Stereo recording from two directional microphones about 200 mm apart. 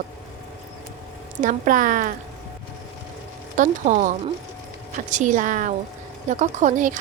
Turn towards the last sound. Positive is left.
turn(degrees=-40)  # may be behind; listen again after turning